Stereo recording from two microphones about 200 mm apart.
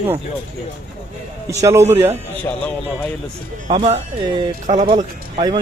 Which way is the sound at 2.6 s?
10° left (ahead or behind).